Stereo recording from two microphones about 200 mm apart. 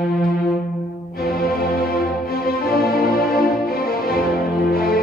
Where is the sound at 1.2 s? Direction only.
50° left (ahead or behind).